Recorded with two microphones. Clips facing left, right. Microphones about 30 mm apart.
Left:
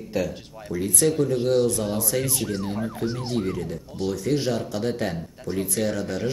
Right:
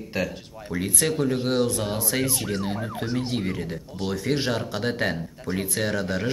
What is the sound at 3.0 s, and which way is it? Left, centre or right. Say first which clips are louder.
Speech: right 1 dB; centre.